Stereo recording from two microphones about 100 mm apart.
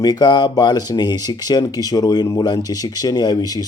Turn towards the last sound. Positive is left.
turn(degrees=40)  # may be behind; listen again after turning